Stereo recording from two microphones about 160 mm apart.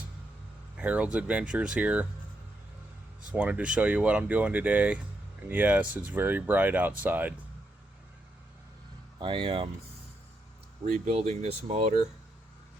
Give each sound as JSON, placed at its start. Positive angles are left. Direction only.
{"t": 0.8, "sound": "speech", "side_deg": -10}
{"t": 3.3, "sound": "speech", "side_deg": -10}
{"t": 9.1, "sound": "speech", "side_deg": -30}
{"t": 10.9, "sound": "speech", "side_deg": -45}